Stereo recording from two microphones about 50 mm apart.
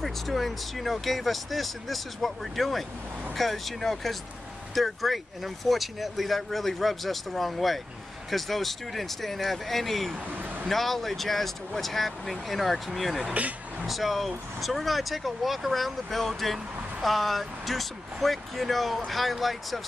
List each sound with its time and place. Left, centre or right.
0.0 s speech: centre
10.2 s a sound: right
10.7 s speech: centre
13.3 s speech: right
13.8 s speech: centre